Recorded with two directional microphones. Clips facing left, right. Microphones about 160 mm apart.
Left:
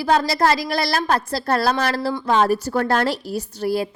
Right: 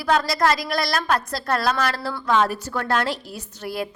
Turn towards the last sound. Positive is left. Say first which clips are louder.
# left 7 dB
turn(degrees=35)  # may be behind; listen again after turning